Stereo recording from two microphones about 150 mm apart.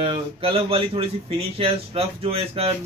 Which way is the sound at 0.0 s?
35° right (ahead or behind).